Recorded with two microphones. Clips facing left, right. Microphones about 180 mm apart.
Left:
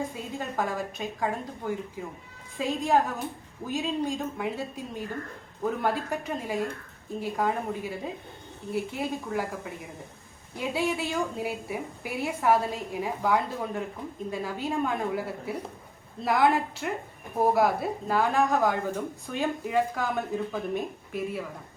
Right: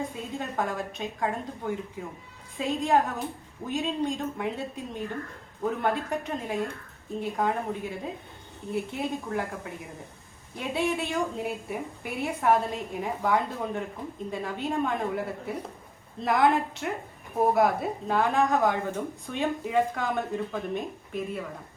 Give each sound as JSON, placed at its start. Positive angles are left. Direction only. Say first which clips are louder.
{"t": 0.3, "sound": "speech", "louder": "even", "side_deg": 0}